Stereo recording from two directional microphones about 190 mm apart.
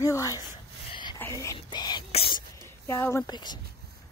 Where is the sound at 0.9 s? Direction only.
25° left (ahead or behind).